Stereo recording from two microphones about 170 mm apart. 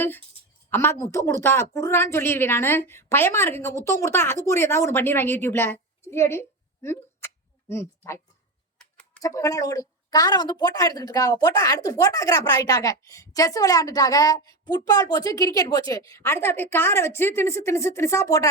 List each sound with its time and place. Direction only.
0.7 s a woman's voice: 15° left (ahead or behind)
6.8 s a sound: 15° left (ahead or behind)
7.7 s a woman's voice: 15° left (ahead or behind)
9.2 s a woman's voice: 20° left (ahead or behind)